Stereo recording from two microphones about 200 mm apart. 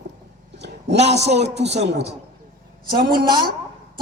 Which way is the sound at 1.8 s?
60° right (ahead or behind).